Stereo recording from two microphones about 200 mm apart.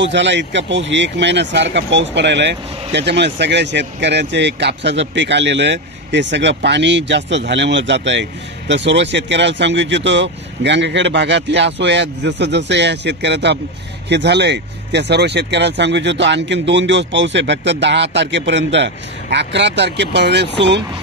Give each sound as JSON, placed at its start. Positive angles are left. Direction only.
{"t": 0.0, "sound": "speech", "side_deg": -65}